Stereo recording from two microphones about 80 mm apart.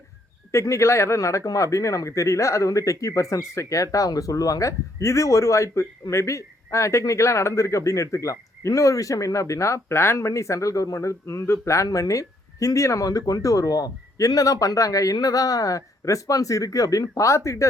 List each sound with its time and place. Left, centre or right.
0.5 s speech: left